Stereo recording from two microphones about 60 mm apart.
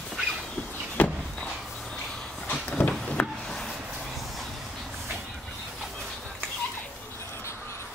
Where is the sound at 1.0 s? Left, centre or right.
Left.